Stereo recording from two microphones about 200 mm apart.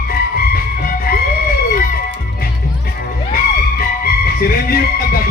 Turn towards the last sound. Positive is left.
turn(degrees=50)  # may be behind; listen again after turning